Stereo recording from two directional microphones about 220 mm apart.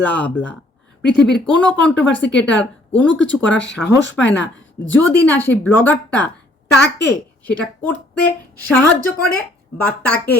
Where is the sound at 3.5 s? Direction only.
55° left (ahead or behind).